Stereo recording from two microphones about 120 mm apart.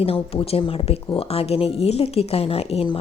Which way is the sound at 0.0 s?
50° left (ahead or behind).